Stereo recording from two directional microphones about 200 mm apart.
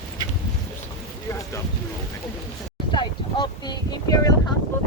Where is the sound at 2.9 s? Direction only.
20° left (ahead or behind).